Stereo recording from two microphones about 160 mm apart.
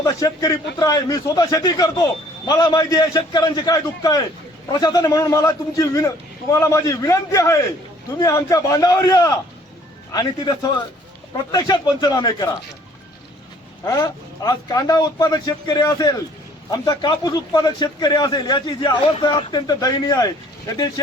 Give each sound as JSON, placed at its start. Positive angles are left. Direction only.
{"t": 0.0, "sound": "a man's voice", "side_deg": 20}
{"t": 13.8, "sound": "a man's voice", "side_deg": 25}